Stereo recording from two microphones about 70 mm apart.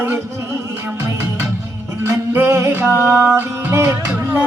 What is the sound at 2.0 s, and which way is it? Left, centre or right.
Music, right.